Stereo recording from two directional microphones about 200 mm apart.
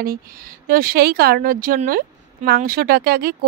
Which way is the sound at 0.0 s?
45° right (ahead or behind).